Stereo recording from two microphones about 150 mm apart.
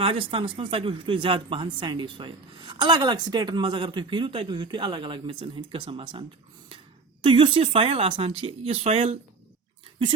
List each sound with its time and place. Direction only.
0.0 s speech: 35° right (ahead or behind)